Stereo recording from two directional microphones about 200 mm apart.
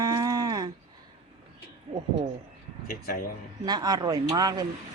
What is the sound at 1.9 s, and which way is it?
Speech, 30° right (ahead or behind).